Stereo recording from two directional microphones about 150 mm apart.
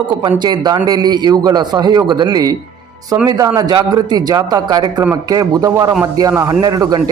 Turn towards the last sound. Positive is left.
turn(degrees=-25)  # may be behind; listen again after turning